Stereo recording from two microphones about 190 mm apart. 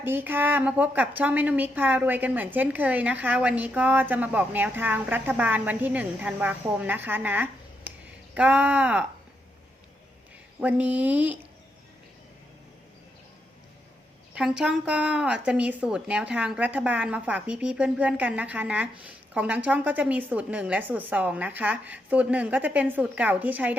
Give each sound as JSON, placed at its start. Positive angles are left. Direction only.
{"t": 0.0, "sound": "speech", "side_deg": -10}
{"t": 10.6, "sound": "speech", "side_deg": -5}
{"t": 14.3, "sound": "speech", "side_deg": -5}